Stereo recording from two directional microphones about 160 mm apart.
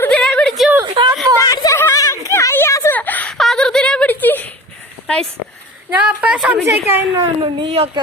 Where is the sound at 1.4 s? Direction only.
20° left (ahead or behind).